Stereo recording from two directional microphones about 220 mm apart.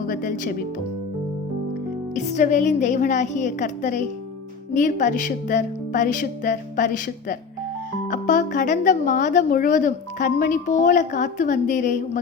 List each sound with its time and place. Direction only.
0.1 s speech: 35° left (ahead or behind)
2.1 s speech: 35° left (ahead or behind)